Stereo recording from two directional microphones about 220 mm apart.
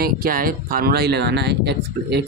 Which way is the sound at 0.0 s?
40° right (ahead or behind).